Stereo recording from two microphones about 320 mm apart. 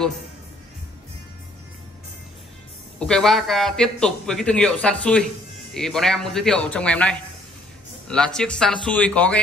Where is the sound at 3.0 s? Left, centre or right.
Centre.